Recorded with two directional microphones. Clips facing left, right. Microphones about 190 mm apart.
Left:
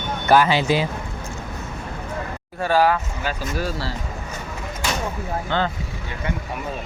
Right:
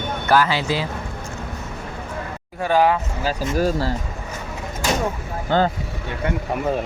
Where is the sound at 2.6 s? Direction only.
20° right (ahead or behind).